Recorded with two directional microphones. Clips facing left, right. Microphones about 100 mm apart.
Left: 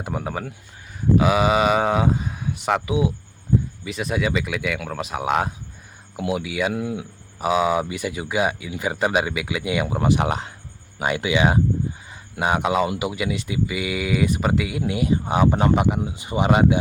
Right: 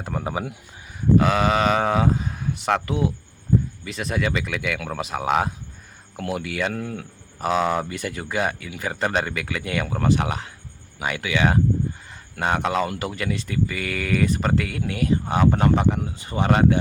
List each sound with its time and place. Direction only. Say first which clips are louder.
0.0 s speech: left 1 dB; 10° left (ahead or behind)
0.3 s speech: right 1 dB; 10° right (ahead or behind)
1.1 s speech: left 1 dB; 5° left (ahead or behind)